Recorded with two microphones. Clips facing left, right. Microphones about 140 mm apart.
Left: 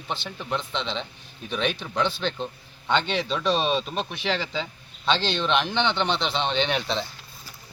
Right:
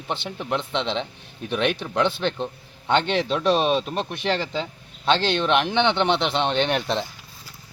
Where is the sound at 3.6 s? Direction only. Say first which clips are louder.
Right 3 dB; 10° right (ahead or behind).